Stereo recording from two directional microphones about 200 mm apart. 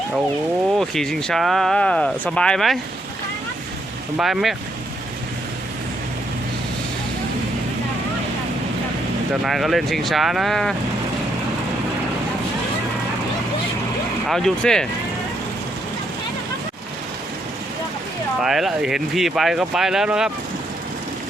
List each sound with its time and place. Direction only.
0.8 s speech: centre (ahead or behind)
4.2 s speech: centre (ahead or behind)
9.4 s speech: centre (ahead or behind)
14.3 s speech: centre (ahead or behind)
18.4 s speech: centre (ahead or behind)